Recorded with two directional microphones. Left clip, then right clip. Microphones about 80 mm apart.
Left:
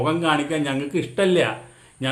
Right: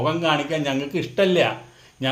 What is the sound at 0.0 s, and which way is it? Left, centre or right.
Speech, left.